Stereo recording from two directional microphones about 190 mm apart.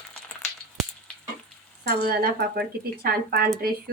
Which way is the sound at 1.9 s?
55° right (ahead or behind).